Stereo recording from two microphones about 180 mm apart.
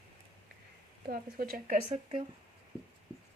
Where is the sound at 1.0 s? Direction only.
55° right (ahead or behind).